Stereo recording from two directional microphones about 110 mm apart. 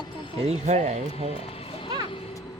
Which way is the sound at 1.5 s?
60° left (ahead or behind).